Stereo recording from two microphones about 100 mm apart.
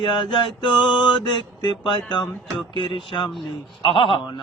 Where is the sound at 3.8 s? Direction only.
65° left (ahead or behind).